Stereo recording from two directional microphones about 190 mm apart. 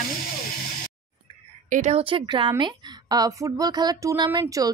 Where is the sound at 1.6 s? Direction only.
40° right (ahead or behind).